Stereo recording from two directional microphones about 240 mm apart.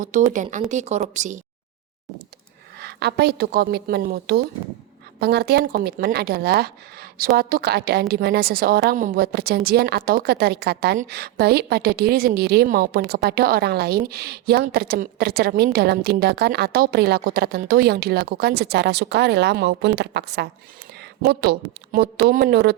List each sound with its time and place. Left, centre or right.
0.0 s a woman's voice: right
2.7 s a woman's voice: right
21.0 s a sound: right
22.2 s a woman's voice: right